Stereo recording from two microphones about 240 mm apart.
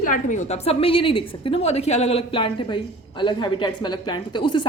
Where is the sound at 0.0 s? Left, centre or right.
Left.